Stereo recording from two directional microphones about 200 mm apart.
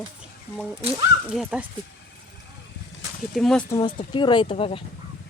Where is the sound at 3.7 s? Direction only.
20° left (ahead or behind).